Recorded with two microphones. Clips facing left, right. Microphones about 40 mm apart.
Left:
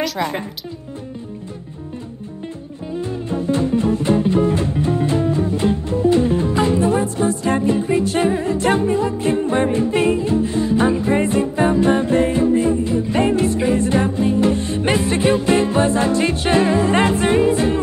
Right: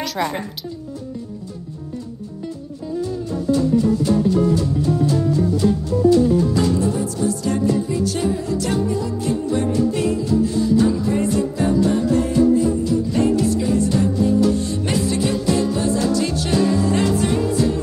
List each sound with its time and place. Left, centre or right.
0.0 s speech: centre
3.0 s music: left